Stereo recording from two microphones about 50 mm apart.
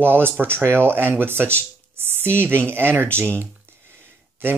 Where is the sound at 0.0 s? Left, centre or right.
Right.